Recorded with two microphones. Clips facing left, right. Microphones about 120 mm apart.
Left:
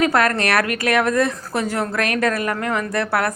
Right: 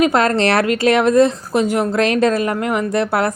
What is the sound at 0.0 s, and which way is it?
A woman's voice, 25° right (ahead or behind).